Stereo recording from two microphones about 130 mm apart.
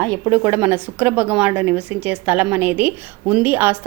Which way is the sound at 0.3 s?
20° right (ahead or behind).